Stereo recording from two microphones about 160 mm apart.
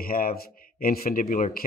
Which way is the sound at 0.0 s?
65° left (ahead or behind).